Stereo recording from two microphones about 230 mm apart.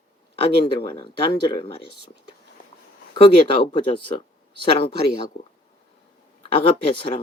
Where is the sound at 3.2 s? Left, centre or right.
Left.